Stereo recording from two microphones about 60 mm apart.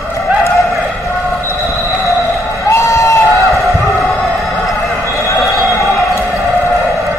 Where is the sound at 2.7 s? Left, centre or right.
Left.